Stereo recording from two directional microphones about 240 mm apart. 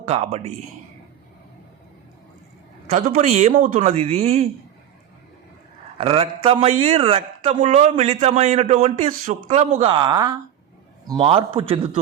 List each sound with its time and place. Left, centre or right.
0.0 s speech: right
2.9 s speech: right
6.0 s speech: right